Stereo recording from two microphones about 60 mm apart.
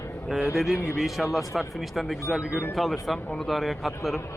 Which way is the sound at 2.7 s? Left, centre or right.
Centre.